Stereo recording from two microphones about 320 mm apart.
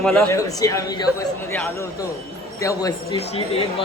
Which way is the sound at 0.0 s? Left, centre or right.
Centre.